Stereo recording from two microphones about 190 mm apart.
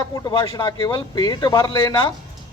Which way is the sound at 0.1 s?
25° left (ahead or behind).